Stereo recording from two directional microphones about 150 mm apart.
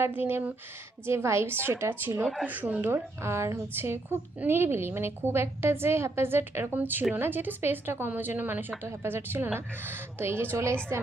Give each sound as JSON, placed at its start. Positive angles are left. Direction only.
{"t": 0.0, "sound": "a woman's voice", "side_deg": -15}